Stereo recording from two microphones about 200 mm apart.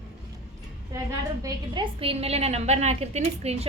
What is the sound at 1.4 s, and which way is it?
A woman's voice, 25° right (ahead or behind).